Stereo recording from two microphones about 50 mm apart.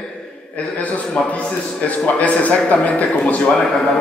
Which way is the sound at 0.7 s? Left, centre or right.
Left.